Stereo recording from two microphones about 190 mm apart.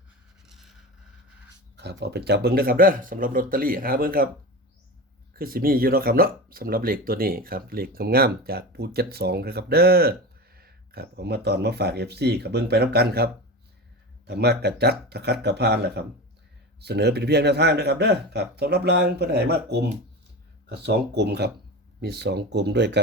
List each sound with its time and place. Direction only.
0.4 s vehicle: centre (ahead or behind)
1.7 s speech: 65° right (ahead or behind)
5.4 s speech: 50° right (ahead or behind)